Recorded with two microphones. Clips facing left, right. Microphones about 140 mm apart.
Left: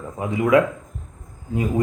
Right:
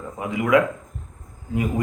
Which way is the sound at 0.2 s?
30° left (ahead or behind).